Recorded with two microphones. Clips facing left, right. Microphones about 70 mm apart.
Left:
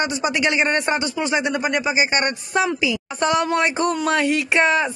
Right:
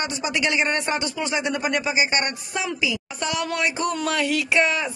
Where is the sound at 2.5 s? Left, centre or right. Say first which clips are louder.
Left 6 dB; left.